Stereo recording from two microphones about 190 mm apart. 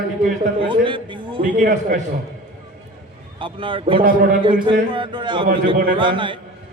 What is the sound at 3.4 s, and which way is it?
A man's voice, 25° right (ahead or behind).